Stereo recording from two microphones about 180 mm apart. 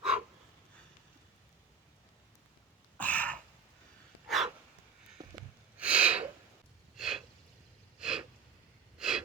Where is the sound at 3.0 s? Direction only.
10° left (ahead or behind).